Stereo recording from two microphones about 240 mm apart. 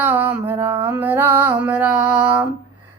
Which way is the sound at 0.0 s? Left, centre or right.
Centre.